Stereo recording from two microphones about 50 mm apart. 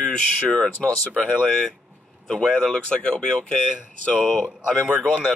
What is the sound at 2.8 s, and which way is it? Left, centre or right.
Speech, centre.